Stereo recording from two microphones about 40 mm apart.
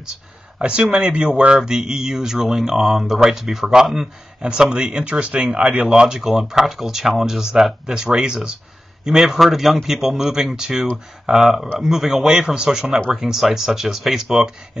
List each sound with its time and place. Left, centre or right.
0.6 s speech: right
1.6 s speech: centre
4.4 s speech: centre
5.9 s speech: centre